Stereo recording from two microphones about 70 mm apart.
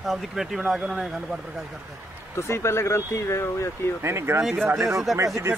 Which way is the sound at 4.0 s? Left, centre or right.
Right.